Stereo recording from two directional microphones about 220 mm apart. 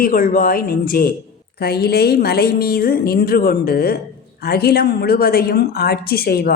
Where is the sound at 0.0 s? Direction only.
40° left (ahead or behind).